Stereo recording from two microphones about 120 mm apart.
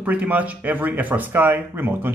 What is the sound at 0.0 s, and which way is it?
Speech, 15° right (ahead or behind).